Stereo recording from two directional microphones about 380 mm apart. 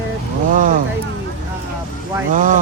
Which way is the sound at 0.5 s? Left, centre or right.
Right.